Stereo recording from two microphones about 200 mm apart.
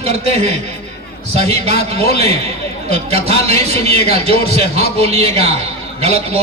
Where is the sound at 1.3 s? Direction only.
30° right (ahead or behind).